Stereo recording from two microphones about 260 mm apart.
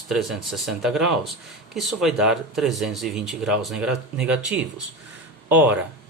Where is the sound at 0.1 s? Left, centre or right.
Centre.